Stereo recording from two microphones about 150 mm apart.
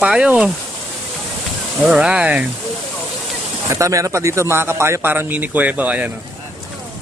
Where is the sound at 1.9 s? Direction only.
5° right (ahead or behind).